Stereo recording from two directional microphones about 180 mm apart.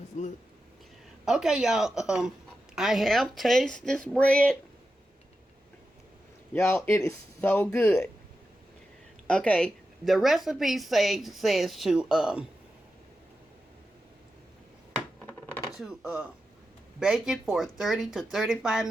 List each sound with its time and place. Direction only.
0.1 s speech: 40° left (ahead or behind)
1.2 s a woman's voice: 5° right (ahead or behind)
6.5 s speech: 15° left (ahead or behind)
9.2 s a woman's voice: 5° left (ahead or behind)
15.3 s a sound: 10° left (ahead or behind)
15.8 s a woman's voice: 5° right (ahead or behind)